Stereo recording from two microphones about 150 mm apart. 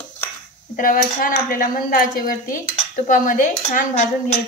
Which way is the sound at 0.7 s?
65° left (ahead or behind).